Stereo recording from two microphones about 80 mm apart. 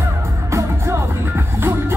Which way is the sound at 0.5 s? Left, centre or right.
Right.